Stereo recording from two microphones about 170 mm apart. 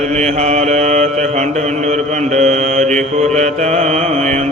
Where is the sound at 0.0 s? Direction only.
40° right (ahead or behind).